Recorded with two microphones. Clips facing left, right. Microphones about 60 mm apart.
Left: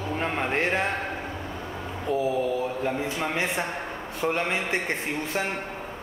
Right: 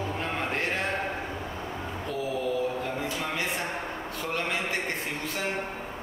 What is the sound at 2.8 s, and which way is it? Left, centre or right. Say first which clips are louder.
A man's voice: left 4 dB; left.